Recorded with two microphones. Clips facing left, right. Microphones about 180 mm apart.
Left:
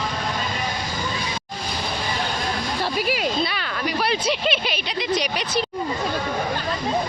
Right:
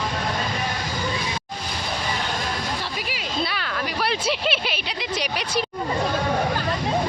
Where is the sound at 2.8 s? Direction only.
45° left (ahead or behind).